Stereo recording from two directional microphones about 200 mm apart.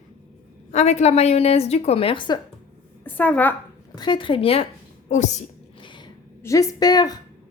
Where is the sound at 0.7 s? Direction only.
35° left (ahead or behind).